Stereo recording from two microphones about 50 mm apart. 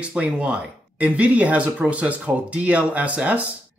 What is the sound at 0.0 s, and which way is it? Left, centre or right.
Speech, right.